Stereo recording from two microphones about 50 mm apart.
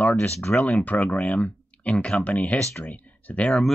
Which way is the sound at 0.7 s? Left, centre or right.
Left.